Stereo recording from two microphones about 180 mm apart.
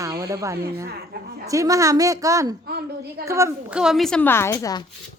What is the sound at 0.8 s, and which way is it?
Speech, 60° right (ahead or behind).